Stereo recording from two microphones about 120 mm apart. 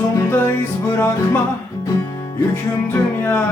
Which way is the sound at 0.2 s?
25° left (ahead or behind).